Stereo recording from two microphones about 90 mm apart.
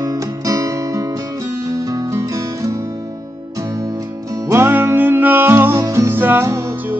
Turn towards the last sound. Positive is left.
turn(degrees=-20)  # may be behind; listen again after turning